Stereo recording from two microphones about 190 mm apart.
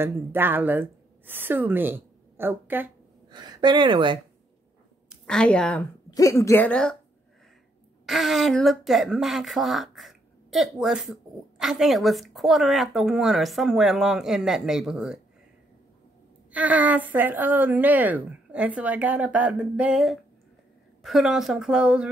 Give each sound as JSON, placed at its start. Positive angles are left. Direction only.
{"t": 0.0, "sound": "a woman's voice", "side_deg": -10}
{"t": 3.3, "sound": "a woman's voice", "side_deg": -25}
{"t": 5.1, "sound": "a woman's voice", "side_deg": 5}
{"t": 6.0, "sound": "a woman's voice", "side_deg": 15}
{"t": 8.1, "sound": "speech", "side_deg": 0}
{"t": 16.5, "sound": "a woman's voice", "side_deg": -10}